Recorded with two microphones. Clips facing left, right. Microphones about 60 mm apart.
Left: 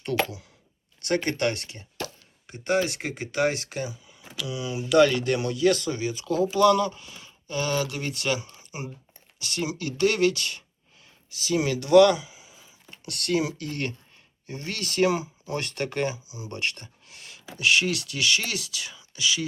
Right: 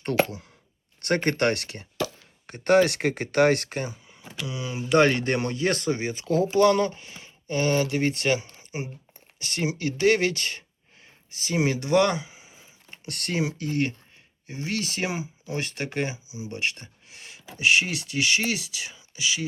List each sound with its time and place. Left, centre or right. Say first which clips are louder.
1.0 s speech: right 2 dB; right
1.5 s speech: right 6 dB; right